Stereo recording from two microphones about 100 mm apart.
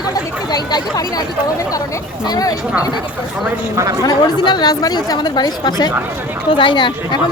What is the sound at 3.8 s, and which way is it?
Speech, 30° right (ahead or behind).